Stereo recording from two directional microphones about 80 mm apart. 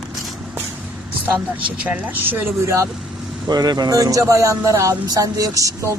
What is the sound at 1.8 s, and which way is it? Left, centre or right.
Speech, centre.